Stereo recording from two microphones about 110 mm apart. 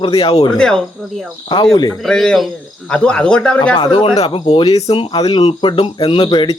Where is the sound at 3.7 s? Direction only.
45° left (ahead or behind).